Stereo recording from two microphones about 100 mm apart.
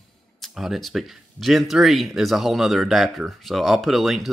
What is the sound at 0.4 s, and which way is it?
Speech, centre (ahead or behind).